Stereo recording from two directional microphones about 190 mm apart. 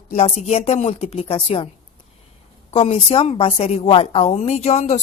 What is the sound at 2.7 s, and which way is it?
Speech, 30° left (ahead or behind).